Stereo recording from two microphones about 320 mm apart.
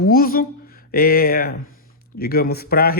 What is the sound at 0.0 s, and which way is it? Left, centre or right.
A woman's voice, left.